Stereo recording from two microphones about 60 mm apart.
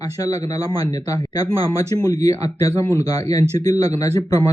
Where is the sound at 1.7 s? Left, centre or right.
Left.